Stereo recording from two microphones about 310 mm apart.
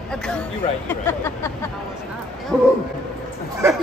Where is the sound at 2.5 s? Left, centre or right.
Centre.